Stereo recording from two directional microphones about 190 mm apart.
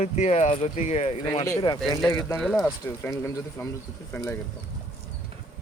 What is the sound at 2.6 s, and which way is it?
Speech, 15° left (ahead or behind).